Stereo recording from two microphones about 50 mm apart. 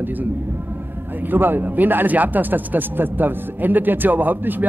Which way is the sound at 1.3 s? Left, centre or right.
Right.